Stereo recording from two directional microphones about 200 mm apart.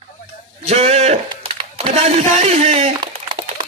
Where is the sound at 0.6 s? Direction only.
30° right (ahead or behind).